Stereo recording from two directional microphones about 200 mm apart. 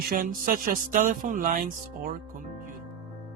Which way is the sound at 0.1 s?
45° right (ahead or behind).